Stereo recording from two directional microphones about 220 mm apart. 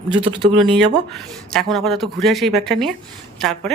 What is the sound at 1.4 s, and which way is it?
Speech, centre (ahead or behind).